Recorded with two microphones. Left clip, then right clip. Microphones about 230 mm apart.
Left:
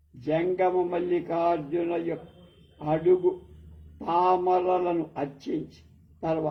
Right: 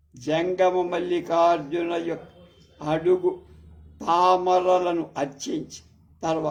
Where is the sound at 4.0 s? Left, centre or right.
Right.